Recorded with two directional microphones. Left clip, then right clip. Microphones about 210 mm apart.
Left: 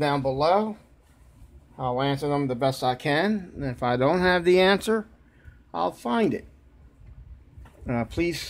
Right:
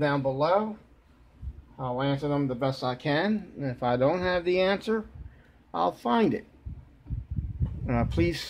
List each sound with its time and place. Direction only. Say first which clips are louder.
0.0 s speech: left 3 dB; 45° left (ahead or behind)
1.8 s speech: left 3 dB; 40° left (ahead or behind); by 5.0 s 25° left (ahead or behind)
5.7 s speech: even; 5° left (ahead or behind)
7.8 s speech: left 1 dB; 5° left (ahead or behind)